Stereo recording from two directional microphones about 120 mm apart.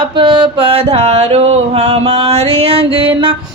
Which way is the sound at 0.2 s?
40° right (ahead or behind).